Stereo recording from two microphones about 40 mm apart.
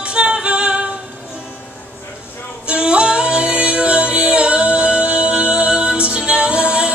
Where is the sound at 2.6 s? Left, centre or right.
Right.